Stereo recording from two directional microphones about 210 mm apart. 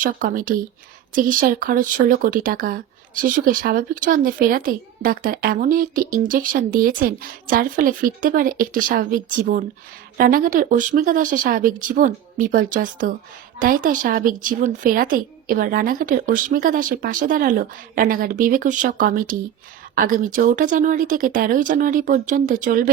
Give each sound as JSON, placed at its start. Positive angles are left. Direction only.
{"t": 0.0, "sound": "speech", "side_deg": -40}